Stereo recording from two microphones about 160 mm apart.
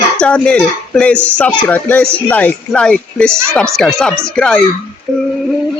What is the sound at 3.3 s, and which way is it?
Speech, 15° right (ahead or behind).